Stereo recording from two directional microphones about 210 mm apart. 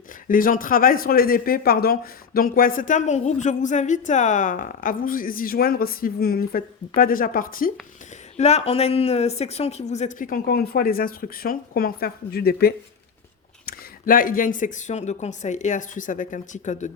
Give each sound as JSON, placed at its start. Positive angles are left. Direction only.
{"t": 0.3, "sound": "speech", "side_deg": 40}
{"t": 8.4, "sound": "speech", "side_deg": 30}